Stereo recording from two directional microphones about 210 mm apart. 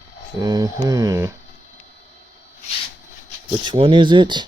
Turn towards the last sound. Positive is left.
turn(degrees=-20)  # may be behind; listen again after turning